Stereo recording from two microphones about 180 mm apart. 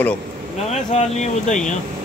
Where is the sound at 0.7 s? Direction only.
40° left (ahead or behind).